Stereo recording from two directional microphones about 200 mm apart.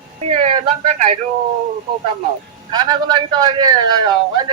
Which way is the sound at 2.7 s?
20° right (ahead or behind).